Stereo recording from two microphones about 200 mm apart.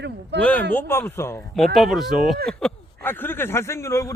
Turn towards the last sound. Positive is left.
turn(degrees=15)  # may be behind; listen again after turning